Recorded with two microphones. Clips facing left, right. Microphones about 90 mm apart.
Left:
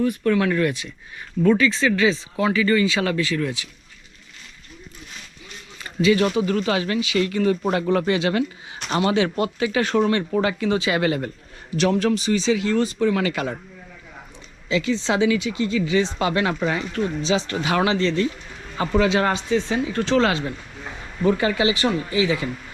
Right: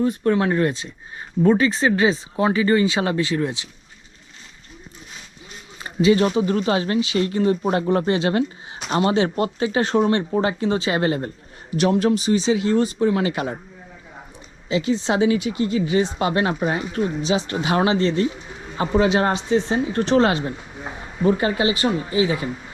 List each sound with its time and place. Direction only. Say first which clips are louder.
0.0 s speech: right 1 dB; 30° right (ahead or behind)
5.8 s speech: right 2 dB; 25° right (ahead or behind)
14.7 s speech: right 1 dB; 20° right (ahead or behind); by 16.8 s 40° right (ahead or behind)
17.0 s speech: right 1 dB; 15° right (ahead or behind)
19.7 s speech: right 2 dB; 30° right (ahead or behind)